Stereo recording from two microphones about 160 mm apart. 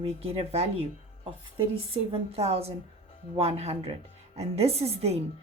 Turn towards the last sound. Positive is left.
turn(degrees=-40)  # may be behind; listen again after turning